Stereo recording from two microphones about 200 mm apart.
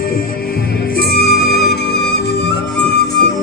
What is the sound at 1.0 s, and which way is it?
Music, 50° left (ahead or behind).